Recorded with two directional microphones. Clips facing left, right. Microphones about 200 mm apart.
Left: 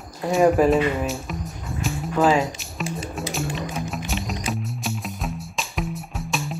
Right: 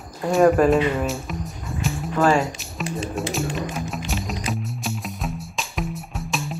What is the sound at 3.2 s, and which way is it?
Music, centre (ahead or behind).